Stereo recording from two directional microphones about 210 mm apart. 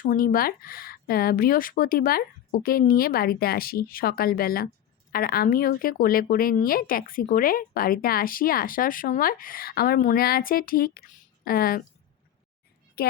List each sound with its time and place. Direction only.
0.0 s speech: 40° left (ahead or behind)
13.0 s a woman's voice: 50° left (ahead or behind)